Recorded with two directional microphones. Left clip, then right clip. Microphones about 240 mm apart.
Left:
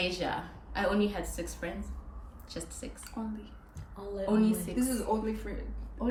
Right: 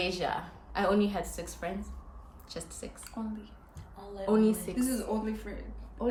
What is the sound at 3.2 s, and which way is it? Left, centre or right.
Speech, centre.